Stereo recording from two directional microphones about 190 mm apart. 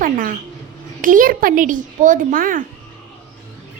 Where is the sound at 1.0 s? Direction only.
45° right (ahead or behind).